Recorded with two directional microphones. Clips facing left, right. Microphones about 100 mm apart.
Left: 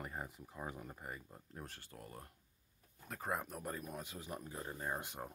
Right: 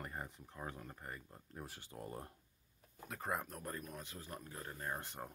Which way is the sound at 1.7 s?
20° right (ahead or behind).